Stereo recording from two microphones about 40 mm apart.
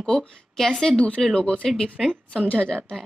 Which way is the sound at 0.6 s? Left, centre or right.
Centre.